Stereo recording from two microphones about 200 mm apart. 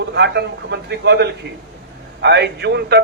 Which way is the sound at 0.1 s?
55° right (ahead or behind).